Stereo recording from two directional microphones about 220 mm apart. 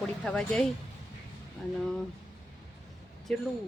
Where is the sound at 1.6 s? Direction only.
Centre (ahead or behind).